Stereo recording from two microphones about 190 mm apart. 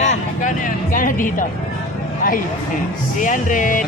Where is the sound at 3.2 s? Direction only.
45° left (ahead or behind).